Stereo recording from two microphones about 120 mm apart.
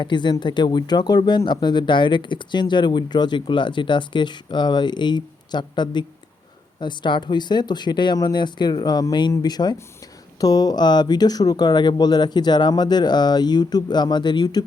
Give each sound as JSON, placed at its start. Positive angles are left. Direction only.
{"t": 0.0, "sound": "speech", "side_deg": 40}